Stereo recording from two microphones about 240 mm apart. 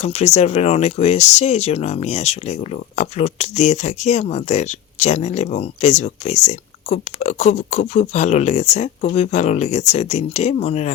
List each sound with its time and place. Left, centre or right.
0.0 s speech: left